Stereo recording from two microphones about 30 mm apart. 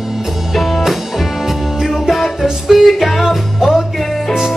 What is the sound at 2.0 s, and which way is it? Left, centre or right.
Music, centre.